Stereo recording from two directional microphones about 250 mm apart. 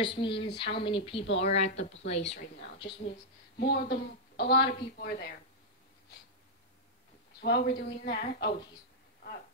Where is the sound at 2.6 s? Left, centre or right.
Left.